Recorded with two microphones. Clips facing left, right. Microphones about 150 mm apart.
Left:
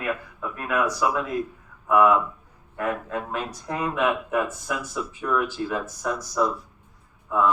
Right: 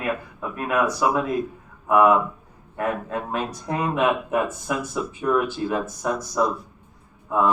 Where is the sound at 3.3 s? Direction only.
25° right (ahead or behind).